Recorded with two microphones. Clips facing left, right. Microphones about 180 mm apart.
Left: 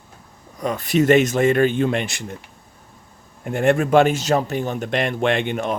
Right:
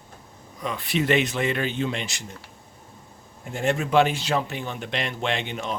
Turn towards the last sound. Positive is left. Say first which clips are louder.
# left 7 dB
turn(degrees=55)  # may be behind; listen again after turning